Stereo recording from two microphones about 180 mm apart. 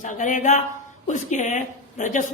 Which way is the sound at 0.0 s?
45° left (ahead or behind).